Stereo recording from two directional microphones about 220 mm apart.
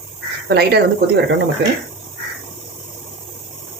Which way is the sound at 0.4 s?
45° right (ahead or behind).